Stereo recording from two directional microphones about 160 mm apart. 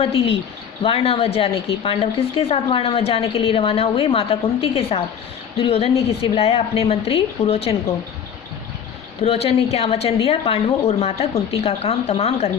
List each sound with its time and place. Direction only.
0.0 s speech: 35° left (ahead or behind)
9.2 s speech: 40° left (ahead or behind)